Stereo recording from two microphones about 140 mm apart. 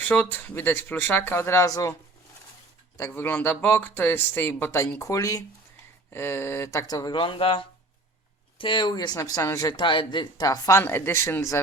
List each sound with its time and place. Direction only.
0.0 s speech: 15° left (ahead or behind)
3.0 s speech: 15° left (ahead or behind)